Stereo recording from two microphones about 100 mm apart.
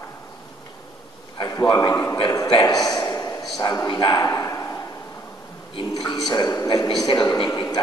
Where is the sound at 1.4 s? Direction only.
40° left (ahead or behind).